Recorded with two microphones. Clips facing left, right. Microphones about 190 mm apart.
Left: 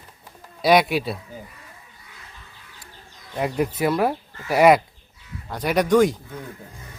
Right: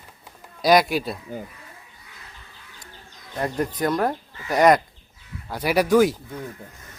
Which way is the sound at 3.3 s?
10° left (ahead or behind).